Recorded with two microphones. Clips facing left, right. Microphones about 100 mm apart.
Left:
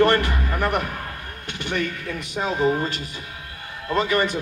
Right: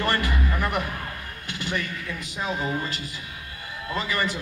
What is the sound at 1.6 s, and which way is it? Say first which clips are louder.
Speech: left 4 dB; 55° left (ahead or behind).